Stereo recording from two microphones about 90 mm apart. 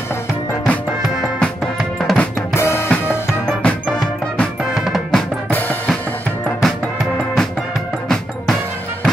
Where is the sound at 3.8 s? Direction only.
5° left (ahead or behind).